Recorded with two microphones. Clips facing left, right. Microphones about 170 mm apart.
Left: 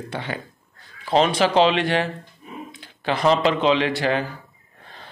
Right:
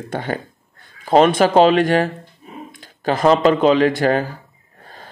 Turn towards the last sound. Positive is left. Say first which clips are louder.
# right 6 dB
turn(degrees=-45)  # may be behind; listen again after turning